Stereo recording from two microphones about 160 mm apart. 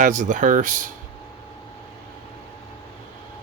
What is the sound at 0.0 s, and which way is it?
Speech, 55° right (ahead or behind).